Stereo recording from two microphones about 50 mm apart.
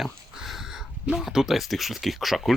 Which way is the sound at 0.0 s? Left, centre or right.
Centre.